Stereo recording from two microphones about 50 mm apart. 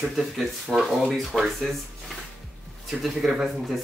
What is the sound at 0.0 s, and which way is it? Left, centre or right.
Speech, centre.